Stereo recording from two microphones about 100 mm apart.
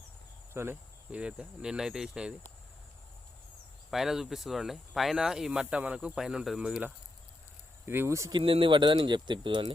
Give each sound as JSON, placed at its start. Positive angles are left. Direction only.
{"t": 0.5, "sound": "speech", "side_deg": -25}
{"t": 1.1, "sound": "cricket", "side_deg": -10}
{"t": 3.9, "sound": "speech", "side_deg": -5}
{"t": 7.9, "sound": "speech", "side_deg": -25}
{"t": 8.3, "sound": "speech", "side_deg": -60}